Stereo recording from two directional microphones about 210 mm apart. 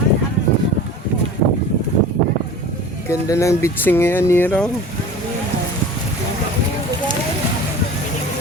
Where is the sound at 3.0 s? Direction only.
15° left (ahead or behind).